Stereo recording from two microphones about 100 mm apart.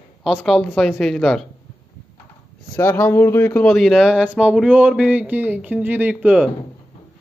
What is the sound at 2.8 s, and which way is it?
Speech, 20° left (ahead or behind).